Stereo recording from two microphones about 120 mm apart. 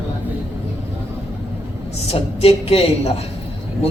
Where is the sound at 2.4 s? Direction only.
55° left (ahead or behind).